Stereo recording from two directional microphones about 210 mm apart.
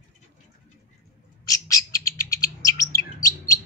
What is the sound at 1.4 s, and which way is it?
Bird, 15° left (ahead or behind).